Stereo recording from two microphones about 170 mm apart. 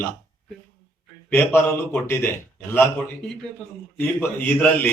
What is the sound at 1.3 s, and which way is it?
A man's voice, 10° left (ahead or behind).